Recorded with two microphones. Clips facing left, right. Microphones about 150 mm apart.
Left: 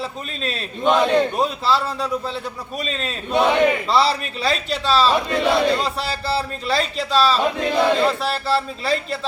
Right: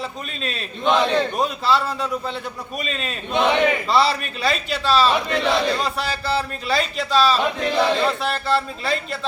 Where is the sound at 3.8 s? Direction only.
Centre (ahead or behind).